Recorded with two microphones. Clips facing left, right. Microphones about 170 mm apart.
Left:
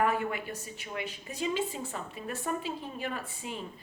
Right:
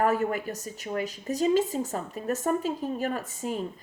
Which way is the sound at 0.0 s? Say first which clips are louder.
Right 4 dB; 40° right (ahead or behind).